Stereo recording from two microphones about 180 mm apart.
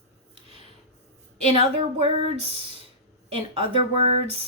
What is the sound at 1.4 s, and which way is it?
Speech, 30° right (ahead or behind).